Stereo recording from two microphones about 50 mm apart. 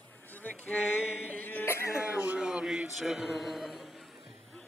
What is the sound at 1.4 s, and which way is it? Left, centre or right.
Cough, left.